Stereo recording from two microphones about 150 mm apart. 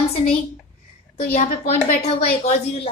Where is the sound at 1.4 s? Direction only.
50° left (ahead or behind).